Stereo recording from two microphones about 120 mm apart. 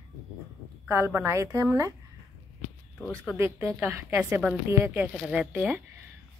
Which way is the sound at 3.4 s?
20° right (ahead or behind).